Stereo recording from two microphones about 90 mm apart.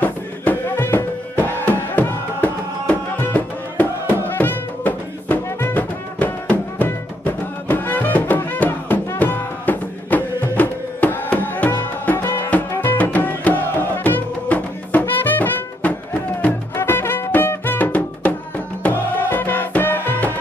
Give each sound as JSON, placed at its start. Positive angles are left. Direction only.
{"t": 0.0, "sound": "music", "side_deg": 20}